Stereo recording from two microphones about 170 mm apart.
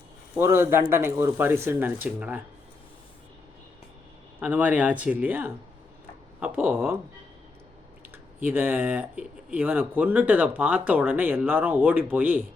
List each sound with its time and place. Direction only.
0.3 s speech: 15° right (ahead or behind)
4.4 s speech: 10° right (ahead or behind)
8.4 s speech: 10° right (ahead or behind)